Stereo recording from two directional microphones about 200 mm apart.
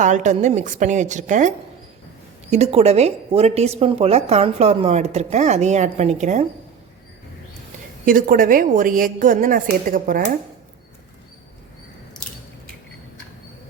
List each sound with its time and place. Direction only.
0.0 s speech: 35° right (ahead or behind)
8.0 s a woman's voice: 40° right (ahead or behind)